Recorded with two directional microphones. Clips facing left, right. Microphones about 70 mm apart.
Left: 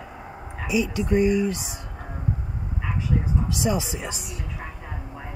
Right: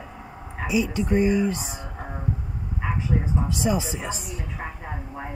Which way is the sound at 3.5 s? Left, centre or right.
Centre.